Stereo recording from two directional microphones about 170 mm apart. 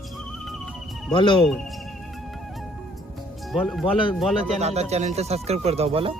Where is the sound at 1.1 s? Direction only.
30° left (ahead or behind).